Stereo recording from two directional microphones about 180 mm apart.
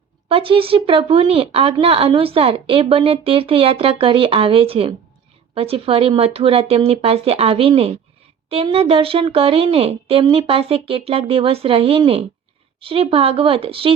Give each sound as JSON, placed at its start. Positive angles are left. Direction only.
{"t": 0.3, "sound": "a woman's voice", "side_deg": -30}